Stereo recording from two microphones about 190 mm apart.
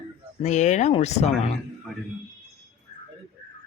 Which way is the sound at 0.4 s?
40° left (ahead or behind).